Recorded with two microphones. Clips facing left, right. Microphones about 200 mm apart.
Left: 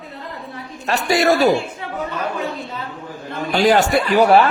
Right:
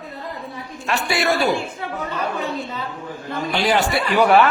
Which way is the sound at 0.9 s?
40° left (ahead or behind).